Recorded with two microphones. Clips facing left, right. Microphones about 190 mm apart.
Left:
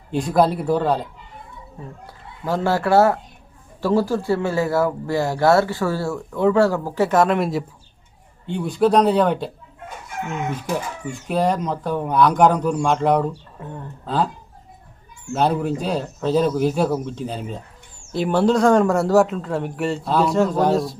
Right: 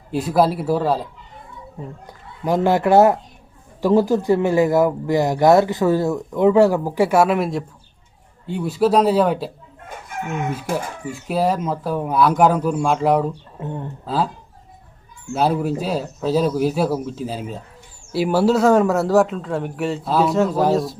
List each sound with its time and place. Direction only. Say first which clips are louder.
0.1 s a man's voice: even; 5° right (ahead or behind)
2.0 s a man's voice: right 4 dB; 15° right (ahead or behind)
11.0 s a man's voice: even; 5° right (ahead or behind)
13.6 s speech: right 5 dB; 20° right (ahead or behind)
14.0 s a man's voice: even; 5° right (ahead or behind)
15.3 s a man's voice: right 1 dB; 5° right (ahead or behind)